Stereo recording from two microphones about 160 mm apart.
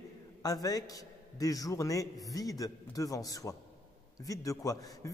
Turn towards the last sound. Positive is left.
turn(degrees=20)  # may be behind; listen again after turning